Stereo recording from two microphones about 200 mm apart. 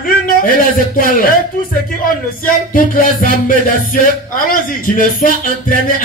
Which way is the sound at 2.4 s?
45° left (ahead or behind).